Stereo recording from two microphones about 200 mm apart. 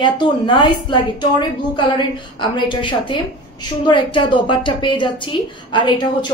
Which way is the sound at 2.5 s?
25° left (ahead or behind).